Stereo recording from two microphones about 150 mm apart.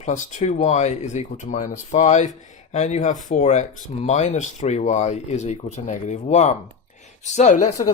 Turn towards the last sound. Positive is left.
turn(degrees=55)  # may be behind; listen again after turning